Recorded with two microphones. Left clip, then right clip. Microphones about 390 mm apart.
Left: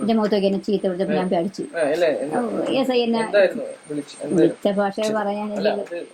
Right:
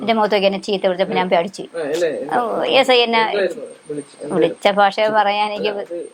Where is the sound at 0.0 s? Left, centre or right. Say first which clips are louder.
Right 5 dB; right.